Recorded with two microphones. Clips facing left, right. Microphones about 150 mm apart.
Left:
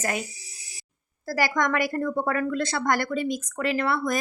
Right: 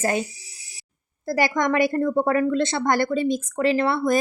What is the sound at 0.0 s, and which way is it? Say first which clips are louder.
Speech: right 6 dB; 30° right (ahead or behind).